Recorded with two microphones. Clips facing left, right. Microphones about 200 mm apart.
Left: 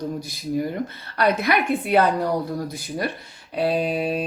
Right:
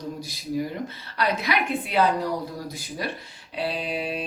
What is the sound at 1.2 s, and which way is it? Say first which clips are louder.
Speech: left 5 dB; 55° left (ahead or behind).